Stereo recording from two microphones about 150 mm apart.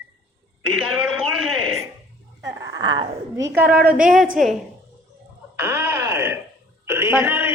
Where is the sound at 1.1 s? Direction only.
Centre (ahead or behind).